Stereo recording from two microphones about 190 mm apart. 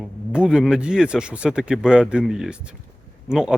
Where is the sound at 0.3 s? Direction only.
5° right (ahead or behind).